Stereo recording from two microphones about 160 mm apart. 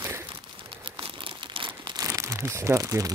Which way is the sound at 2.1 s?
15° right (ahead or behind).